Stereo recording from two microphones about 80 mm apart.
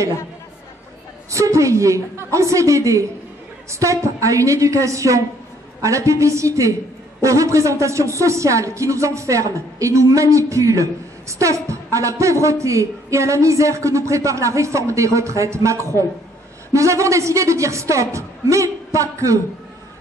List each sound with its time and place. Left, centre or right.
1.3 s speech: right